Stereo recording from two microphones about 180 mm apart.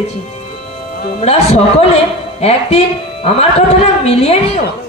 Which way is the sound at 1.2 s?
35° left (ahead or behind).